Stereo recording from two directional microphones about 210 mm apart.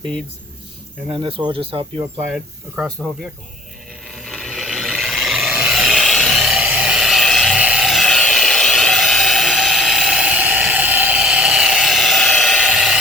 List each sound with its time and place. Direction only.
1.0 s speech: 25° right (ahead or behind)
2.3 s speech: centre (ahead or behind)
4.2 s a sound: centre (ahead or behind)